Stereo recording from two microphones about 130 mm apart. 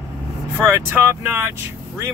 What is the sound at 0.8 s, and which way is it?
Speech, 15° right (ahead or behind).